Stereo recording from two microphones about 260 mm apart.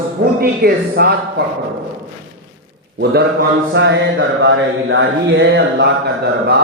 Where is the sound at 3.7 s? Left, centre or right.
Right.